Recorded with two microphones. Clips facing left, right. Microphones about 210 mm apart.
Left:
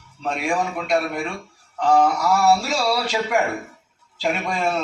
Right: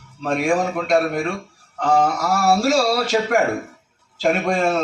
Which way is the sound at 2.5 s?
45° right (ahead or behind).